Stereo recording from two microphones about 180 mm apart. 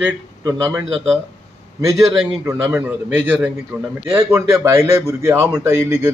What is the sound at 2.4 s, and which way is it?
A man's voice, 15° right (ahead or behind).